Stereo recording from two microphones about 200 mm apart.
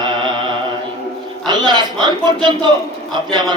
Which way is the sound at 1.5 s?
20° right (ahead or behind).